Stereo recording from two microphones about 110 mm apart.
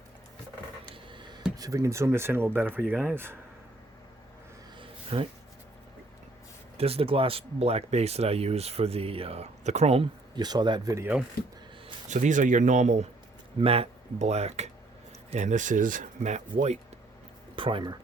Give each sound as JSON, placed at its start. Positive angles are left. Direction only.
{"t": 0.9, "sound": "a sound", "side_deg": -45}
{"t": 1.5, "sound": "speech", "side_deg": -30}
{"t": 4.8, "sound": "a sound", "side_deg": -55}
{"t": 6.7, "sound": "speech", "side_deg": -65}
{"t": 10.3, "sound": "a man's voice", "side_deg": -40}
{"t": 10.8, "sound": "speech", "side_deg": -25}
{"t": 12.0, "sound": "speech", "side_deg": -90}
{"t": 13.6, "sound": "speech", "side_deg": -60}
{"t": 15.3, "sound": "speech", "side_deg": -90}
{"t": 17.5, "sound": "speech", "side_deg": -50}